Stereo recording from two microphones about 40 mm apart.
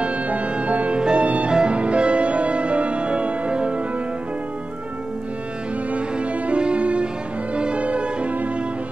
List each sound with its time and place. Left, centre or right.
0.0 s music: right
5.9 s music: right
7.5 s violin: right